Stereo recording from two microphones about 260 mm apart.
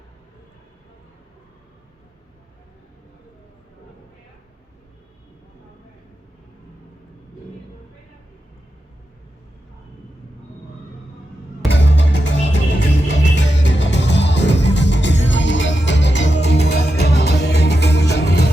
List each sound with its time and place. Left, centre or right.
11.7 s music: left